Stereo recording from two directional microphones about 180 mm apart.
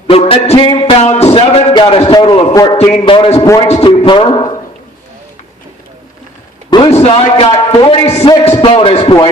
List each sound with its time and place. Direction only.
0.1 s a man's voice: 35° left (ahead or behind)
2.9 s a man's voice: 35° left (ahead or behind)
6.7 s a man's voice: 30° left (ahead or behind)